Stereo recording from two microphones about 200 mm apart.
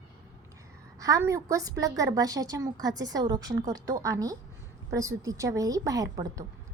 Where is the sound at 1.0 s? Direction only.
15° right (ahead or behind).